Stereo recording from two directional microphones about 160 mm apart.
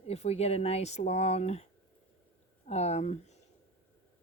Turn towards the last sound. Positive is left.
turn(degrees=45)  # may be behind; listen again after turning